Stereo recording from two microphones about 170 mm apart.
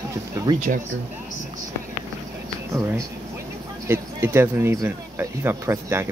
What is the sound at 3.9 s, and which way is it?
Speech, 15° right (ahead or behind).